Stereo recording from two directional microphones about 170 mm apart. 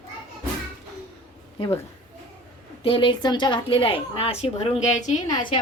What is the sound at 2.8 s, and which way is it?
A woman's voice, 30° left (ahead or behind).